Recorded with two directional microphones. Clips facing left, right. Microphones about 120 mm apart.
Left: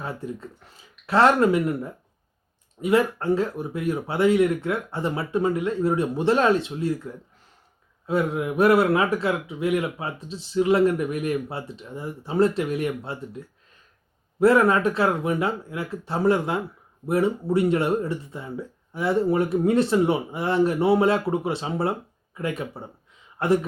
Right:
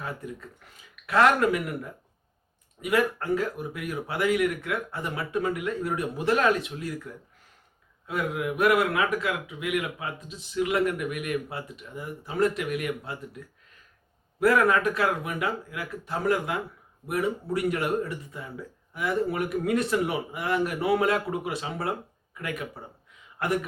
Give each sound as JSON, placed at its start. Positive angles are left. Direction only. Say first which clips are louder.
{"t": 0.0, "sound": "speech", "louder": "left 4 dB", "side_deg": 30}